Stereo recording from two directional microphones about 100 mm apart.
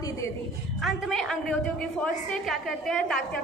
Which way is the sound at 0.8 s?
Centre (ahead or behind).